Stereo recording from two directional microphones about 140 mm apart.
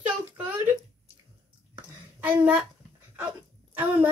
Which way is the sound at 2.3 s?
10° right (ahead or behind).